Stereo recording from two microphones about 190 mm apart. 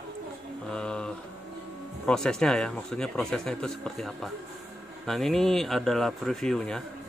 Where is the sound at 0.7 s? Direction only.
5° left (ahead or behind).